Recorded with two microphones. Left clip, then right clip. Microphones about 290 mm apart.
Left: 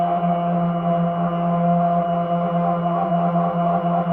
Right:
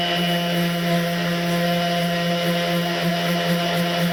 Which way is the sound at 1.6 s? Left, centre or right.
Centre.